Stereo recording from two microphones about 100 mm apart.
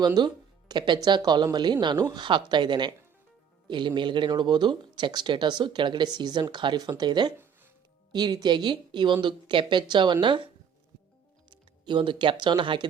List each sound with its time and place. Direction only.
0.0 s speech: 45° right (ahead or behind)